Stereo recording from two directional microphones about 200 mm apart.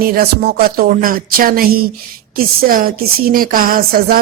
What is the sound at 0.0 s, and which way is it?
Speech, 45° right (ahead or behind).